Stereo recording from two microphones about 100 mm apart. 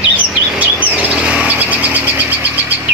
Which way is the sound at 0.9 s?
15° right (ahead or behind).